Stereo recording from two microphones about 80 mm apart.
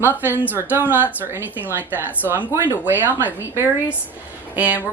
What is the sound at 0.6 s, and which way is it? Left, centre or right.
A woman's voice, right.